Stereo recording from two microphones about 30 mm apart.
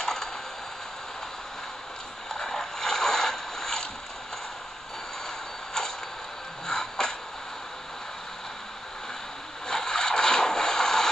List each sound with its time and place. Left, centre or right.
0.0 s typing: centre
2.3 s boat: centre
6.6 s music: centre
9.7 s a sound: left